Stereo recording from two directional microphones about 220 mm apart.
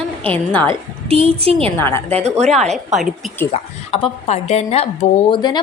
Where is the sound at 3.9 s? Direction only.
25° left (ahead or behind).